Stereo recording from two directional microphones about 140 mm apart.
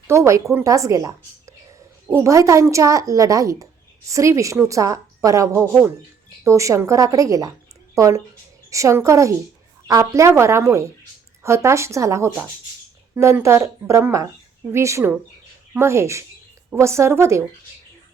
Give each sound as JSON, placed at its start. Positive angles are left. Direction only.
{"t": 0.1, "sound": "a woman's voice", "side_deg": -20}